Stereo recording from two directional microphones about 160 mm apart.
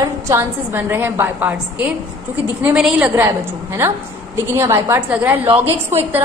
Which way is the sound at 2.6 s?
5° right (ahead or behind).